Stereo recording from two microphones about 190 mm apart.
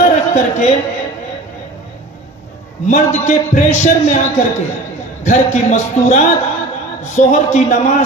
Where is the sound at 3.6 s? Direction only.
40° left (ahead or behind).